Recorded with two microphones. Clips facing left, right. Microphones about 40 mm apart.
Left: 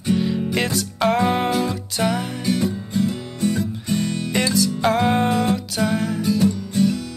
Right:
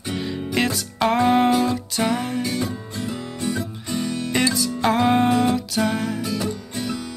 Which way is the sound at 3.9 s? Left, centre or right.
Centre.